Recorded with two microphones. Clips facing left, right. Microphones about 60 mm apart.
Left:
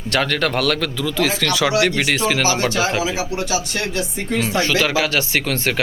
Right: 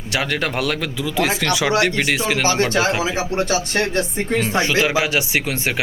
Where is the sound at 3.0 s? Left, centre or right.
Right.